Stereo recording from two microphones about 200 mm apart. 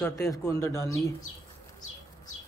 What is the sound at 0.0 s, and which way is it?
A man's voice, 10° left (ahead or behind).